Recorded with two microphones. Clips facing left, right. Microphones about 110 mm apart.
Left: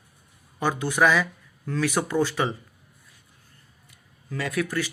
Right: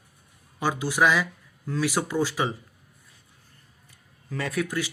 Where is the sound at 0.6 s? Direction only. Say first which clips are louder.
Left 1 dB; 10° right (ahead or behind).